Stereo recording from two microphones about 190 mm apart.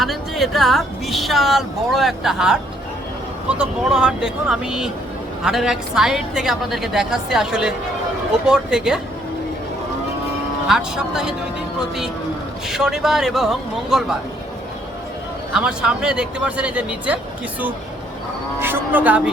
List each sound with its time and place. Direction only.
0.0 s a woman's voice: centre (ahead or behind)
10.7 s a woman's voice: 5° right (ahead or behind)
12.6 s a woman's voice: centre (ahead or behind)
15.5 s a woman's voice: 5° right (ahead or behind)
18.6 s speech: 10° right (ahead or behind)